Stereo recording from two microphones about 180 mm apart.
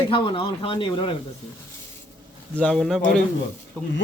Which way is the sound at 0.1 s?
25° left (ahead or behind).